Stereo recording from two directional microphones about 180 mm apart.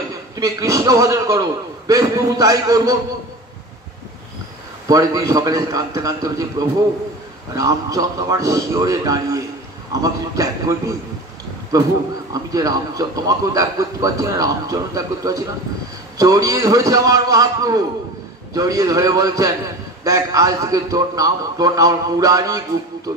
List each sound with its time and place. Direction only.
0.4 s speech: 15° right (ahead or behind)
4.8 s speech: 20° right (ahead or behind)
7.5 s speech: 20° right (ahead or behind)